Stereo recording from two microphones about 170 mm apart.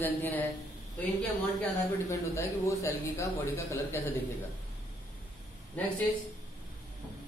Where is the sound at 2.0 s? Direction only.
15° left (ahead or behind).